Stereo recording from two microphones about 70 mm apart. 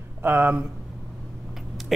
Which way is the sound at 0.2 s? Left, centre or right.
Right.